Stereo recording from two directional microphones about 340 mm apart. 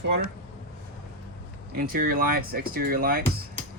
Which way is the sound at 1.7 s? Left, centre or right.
Right.